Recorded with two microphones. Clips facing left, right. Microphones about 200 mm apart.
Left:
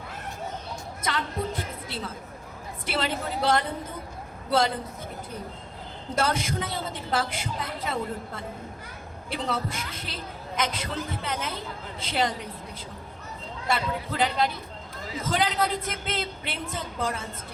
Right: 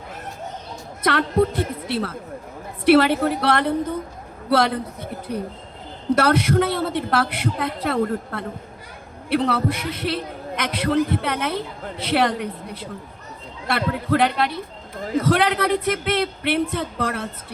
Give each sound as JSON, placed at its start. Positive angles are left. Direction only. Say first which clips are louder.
{"t": 1.0, "sound": "a woman's voice", "louder": "right 11 dB", "side_deg": -65}